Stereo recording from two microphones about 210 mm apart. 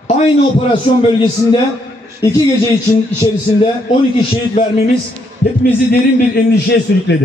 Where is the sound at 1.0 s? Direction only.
25° left (ahead or behind).